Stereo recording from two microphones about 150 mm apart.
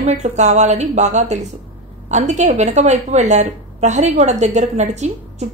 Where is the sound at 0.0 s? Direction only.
50° right (ahead or behind).